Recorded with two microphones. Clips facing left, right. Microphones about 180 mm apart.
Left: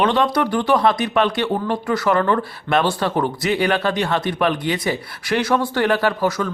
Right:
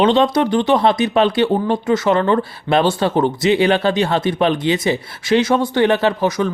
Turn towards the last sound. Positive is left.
turn(degrees=-20)  # may be behind; listen again after turning